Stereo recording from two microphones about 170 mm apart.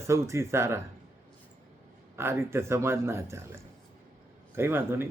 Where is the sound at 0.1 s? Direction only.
15° right (ahead or behind).